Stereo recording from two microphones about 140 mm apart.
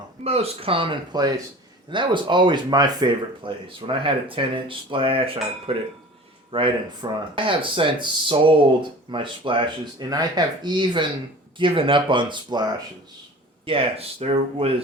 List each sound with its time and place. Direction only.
0.3 s speech: 45° right (ahead or behind)
13.7 s speech: 45° right (ahead or behind)